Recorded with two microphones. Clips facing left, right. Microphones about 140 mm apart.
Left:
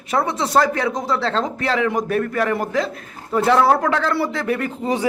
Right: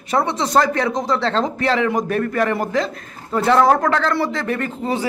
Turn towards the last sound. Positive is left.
turn(degrees=15)  # may be behind; listen again after turning